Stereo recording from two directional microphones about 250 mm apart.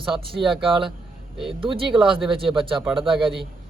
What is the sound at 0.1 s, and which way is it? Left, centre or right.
Speech, centre.